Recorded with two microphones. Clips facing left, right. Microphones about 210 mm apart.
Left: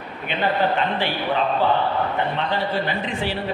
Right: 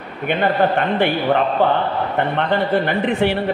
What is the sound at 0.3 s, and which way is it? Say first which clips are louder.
A man's voice: right 4 dB; 55° right (ahead or behind).